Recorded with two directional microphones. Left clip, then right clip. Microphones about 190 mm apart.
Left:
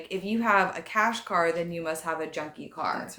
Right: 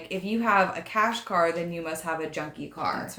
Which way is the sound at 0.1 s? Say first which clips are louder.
Even; 25° left (ahead or behind).